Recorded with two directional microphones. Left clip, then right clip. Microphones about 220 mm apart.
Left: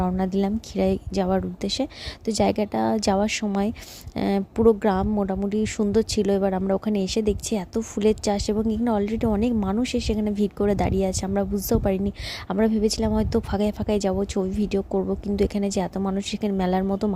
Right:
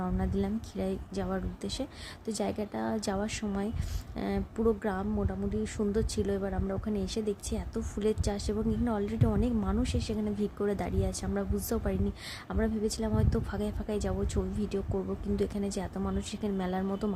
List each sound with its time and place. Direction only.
0.0 s a woman's voice: 35° left (ahead or behind)